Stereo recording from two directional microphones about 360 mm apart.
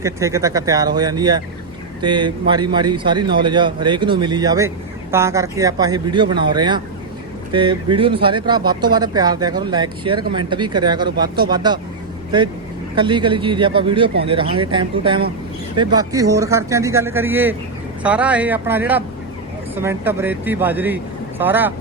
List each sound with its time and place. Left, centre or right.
0.0 s speech: centre
13.0 s speech: centre